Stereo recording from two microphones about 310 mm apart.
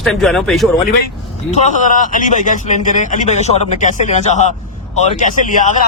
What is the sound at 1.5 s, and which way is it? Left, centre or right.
Speech, left.